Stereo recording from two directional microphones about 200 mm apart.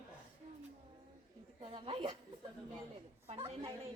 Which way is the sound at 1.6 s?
25° right (ahead or behind).